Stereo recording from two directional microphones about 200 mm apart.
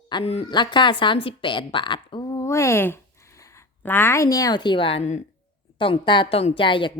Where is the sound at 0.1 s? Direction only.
25° left (ahead or behind).